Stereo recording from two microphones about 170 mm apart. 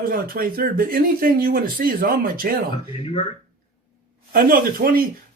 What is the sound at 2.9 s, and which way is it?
Speech, 35° left (ahead or behind).